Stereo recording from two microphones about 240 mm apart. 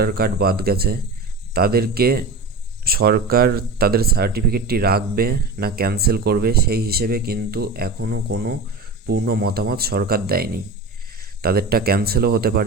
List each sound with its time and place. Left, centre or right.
0.0 s speech: right